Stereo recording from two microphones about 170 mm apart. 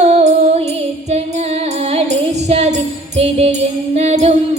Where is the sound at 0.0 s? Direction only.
40° right (ahead or behind).